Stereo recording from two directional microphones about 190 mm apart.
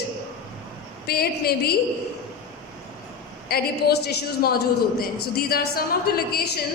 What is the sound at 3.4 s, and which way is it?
A woman's voice, 55° left (ahead or behind).